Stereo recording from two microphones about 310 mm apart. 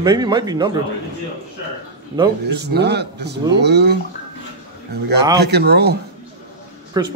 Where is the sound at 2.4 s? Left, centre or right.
Right.